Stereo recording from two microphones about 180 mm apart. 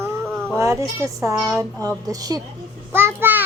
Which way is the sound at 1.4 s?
Centre (ahead or behind).